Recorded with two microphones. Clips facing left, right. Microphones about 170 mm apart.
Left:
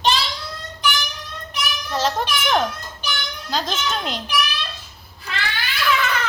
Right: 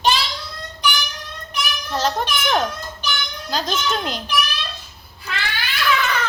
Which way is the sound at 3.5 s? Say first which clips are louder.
Right 2 dB; centre (ahead or behind).